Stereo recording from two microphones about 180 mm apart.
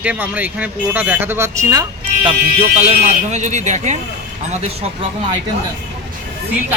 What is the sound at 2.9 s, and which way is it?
Speech, 40° right (ahead or behind).